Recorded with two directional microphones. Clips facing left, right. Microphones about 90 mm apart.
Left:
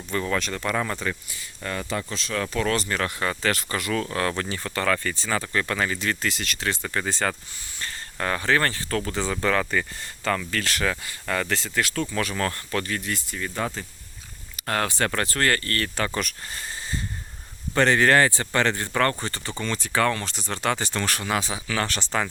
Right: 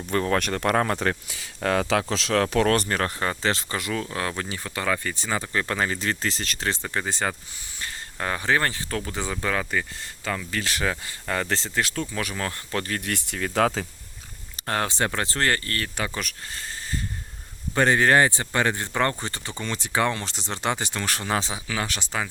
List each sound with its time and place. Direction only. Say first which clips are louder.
0.1 s speech: right 3 dB; 45° right (ahead or behind)
3.0 s speech: even; 35° right (ahead or behind)
6.8 s speech: left 1 dB; 20° right (ahead or behind)
12.0 s speech: left 3 dB; 15° right (ahead or behind)
12.7 s speech: right 2 dB; 40° right (ahead or behind)
13.0 s speech: right 1 dB; 65° right (ahead or behind); by 13.8 s 90° right
14.5 s speech: even; 25° right (ahead or behind)
16.1 s speech: left 3 dB; centre (ahead or behind)
17.7 s speech: even; 15° right (ahead or behind)
21.2 s speech: even; 30° right (ahead or behind); by 22.3 s 5° right (ahead or behind)